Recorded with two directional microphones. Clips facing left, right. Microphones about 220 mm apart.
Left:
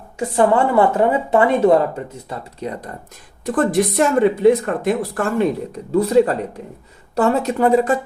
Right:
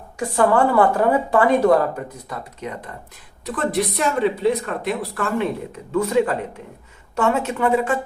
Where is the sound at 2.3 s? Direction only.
35° left (ahead or behind).